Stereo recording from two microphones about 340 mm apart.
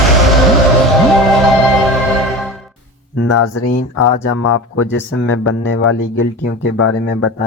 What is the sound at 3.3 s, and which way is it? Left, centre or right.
Speech, left.